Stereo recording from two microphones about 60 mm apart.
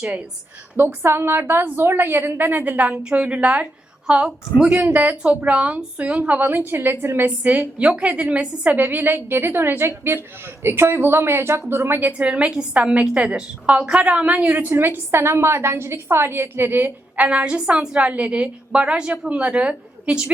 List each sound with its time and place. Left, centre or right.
0.8 s a woman's voice: right
6.5 s a woman's voice: right
7.3 s a woman's voice: right
12.1 s a woman's voice: centre; by 16.9 s right
17.2 s a woman's voice: right